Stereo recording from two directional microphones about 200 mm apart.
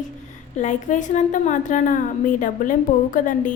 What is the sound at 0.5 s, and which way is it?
A woman's voice, 40° left (ahead or behind).